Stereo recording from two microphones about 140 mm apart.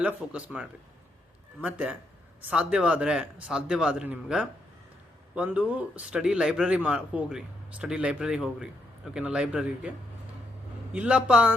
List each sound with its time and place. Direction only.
0.0 s speech: 10° right (ahead or behind)
10.9 s speech: 10° right (ahead or behind)